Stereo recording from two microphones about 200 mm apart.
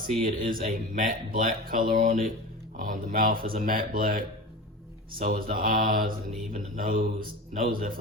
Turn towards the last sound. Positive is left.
turn(degrees=-45)  # may be behind; listen again after turning